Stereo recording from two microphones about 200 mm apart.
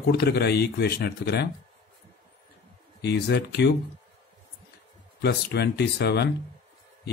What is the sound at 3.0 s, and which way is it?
Speech, 55° left (ahead or behind).